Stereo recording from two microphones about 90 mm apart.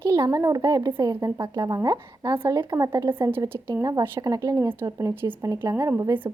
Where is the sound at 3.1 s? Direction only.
25° right (ahead or behind).